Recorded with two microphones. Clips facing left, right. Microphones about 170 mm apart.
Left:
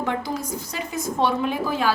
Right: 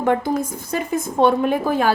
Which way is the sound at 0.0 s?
50° right (ahead or behind).